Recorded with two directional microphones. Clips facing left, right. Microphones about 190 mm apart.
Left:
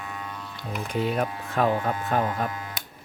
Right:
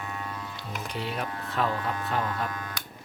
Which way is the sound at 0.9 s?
45° left (ahead or behind).